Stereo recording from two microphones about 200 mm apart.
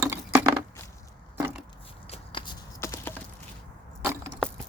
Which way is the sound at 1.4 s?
10° right (ahead or behind).